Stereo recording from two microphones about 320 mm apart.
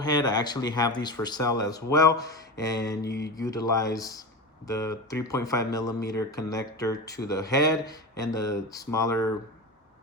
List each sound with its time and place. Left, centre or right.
0.0 s speech: centre
3.0 s mantra: left
3.4 s speech: centre